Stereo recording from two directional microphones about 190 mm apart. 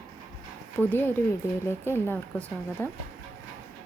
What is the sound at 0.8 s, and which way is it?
Speech, 10° left (ahead or behind).